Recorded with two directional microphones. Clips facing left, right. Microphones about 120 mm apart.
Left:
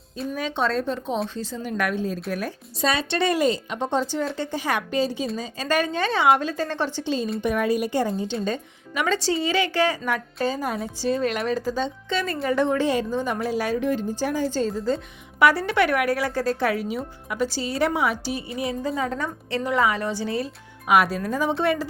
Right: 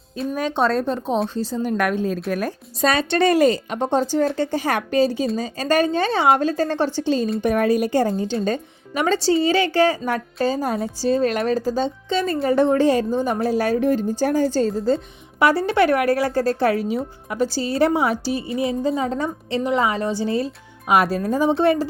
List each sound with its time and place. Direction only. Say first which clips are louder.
0.3 s speech: right 4 dB; 45° right (ahead or behind)
9.0 s a woman's voice: right 5 dB; 30° right (ahead or behind)